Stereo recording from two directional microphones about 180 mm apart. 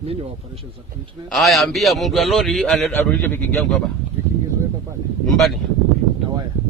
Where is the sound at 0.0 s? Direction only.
35° right (ahead or behind).